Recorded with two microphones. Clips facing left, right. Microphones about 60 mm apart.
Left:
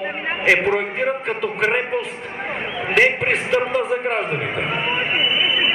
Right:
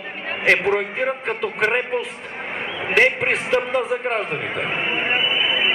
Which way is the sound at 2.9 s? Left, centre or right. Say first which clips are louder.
Left 1 dB; centre.